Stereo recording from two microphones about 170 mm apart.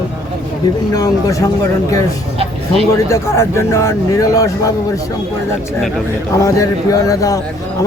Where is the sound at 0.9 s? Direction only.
20° left (ahead or behind).